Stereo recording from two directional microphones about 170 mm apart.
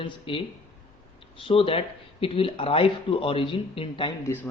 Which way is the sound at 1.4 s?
35° left (ahead or behind).